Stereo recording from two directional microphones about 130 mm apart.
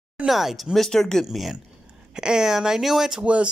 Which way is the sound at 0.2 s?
Centre (ahead or behind).